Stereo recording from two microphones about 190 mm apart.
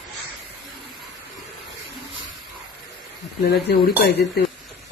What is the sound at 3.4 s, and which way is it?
Speech, 55° left (ahead or behind).